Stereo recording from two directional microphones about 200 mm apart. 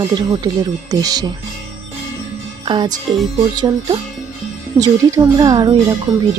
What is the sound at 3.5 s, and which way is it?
Speech, 20° right (ahead or behind).